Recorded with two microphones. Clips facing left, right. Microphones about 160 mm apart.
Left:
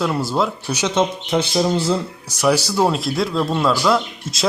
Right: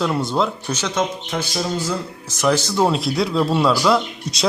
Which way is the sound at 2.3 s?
10° left (ahead or behind).